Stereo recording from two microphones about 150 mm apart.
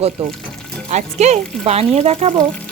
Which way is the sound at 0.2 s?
40° right (ahead or behind).